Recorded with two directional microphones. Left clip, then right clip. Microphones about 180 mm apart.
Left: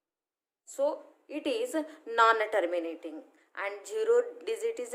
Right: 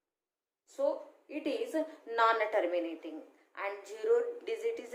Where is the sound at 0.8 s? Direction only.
45° left (ahead or behind).